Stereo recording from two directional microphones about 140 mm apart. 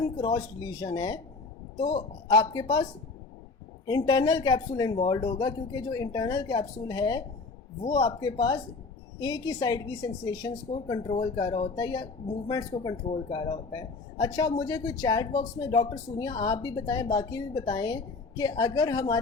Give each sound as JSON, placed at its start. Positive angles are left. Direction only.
{"t": 0.0, "sound": "speech", "side_deg": 25}
{"t": 2.2, "sound": "speech", "side_deg": 30}
{"t": 3.8, "sound": "speech", "side_deg": 30}
{"t": 10.7, "sound": "speech", "side_deg": 35}